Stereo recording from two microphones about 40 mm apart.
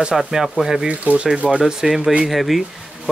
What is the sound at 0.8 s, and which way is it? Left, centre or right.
Speech, right.